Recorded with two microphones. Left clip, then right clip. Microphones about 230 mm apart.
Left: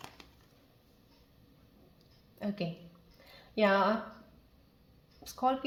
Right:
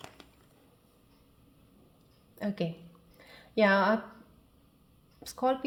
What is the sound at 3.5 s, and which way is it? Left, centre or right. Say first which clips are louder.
Speech: right 2 dB; right.